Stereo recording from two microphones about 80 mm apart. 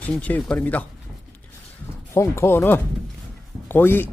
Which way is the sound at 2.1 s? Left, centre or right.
Left.